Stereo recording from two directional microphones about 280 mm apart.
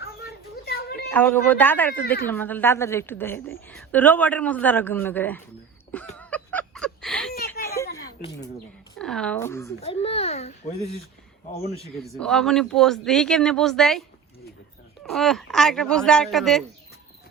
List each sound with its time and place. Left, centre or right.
0.2 s a sound: left
1.1 s a woman's voice: centre
5.9 s a sound: centre
9.0 s speech: centre
9.8 s a child's voice: left
12.1 s speech: centre
15.1 s speech: centre